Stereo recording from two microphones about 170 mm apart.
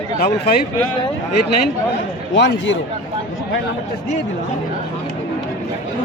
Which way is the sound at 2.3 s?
90° left.